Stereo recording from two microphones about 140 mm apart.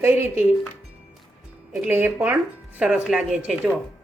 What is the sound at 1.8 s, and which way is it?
A woman's voice, 15° right (ahead or behind).